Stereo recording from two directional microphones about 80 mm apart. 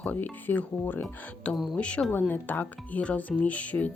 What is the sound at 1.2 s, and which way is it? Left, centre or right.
Speech, centre.